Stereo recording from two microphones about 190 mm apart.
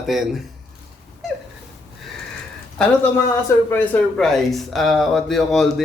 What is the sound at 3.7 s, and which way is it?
Speech, 10° left (ahead or behind).